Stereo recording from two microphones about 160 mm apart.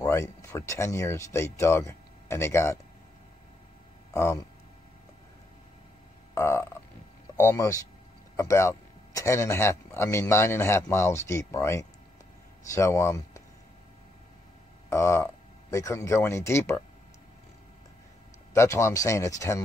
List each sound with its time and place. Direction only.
0.0 s speech: 20° left (ahead or behind)
4.1 s speech: 20° left (ahead or behind)
6.3 s frog: 15° left (ahead or behind)
7.3 s speech: 15° left (ahead or behind)
14.9 s speech: 20° left (ahead or behind)
18.5 s speech: 15° left (ahead or behind)